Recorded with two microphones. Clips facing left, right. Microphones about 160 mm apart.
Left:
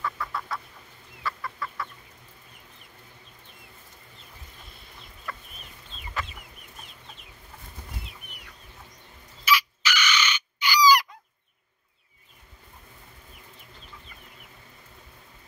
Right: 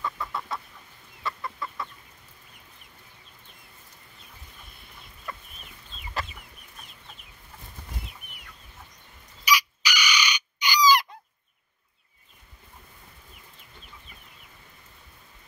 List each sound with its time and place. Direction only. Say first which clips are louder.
0.0 s chicken: even; 20° right (ahead or behind)
5.3 s chicken: even; 20° right (ahead or behind)
9.4 s chicken: left 1 dB; 15° right (ahead or behind)